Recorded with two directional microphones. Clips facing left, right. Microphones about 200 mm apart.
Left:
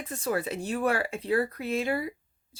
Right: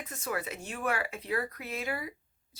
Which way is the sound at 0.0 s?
30° left (ahead or behind).